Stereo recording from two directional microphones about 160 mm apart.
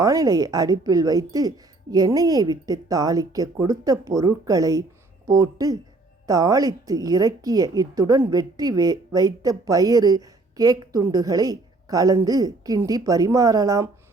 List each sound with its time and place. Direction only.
0.0 s a woman's voice: 20° right (ahead or behind)